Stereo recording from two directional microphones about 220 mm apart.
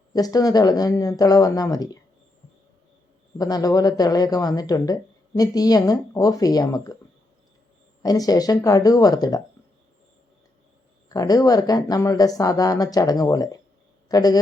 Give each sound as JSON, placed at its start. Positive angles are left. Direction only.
{"t": 0.1, "sound": "speech", "side_deg": 15}
{"t": 3.3, "sound": "speech", "side_deg": 15}
{"t": 8.0, "sound": "speech", "side_deg": 15}
{"t": 11.1, "sound": "speech", "side_deg": 15}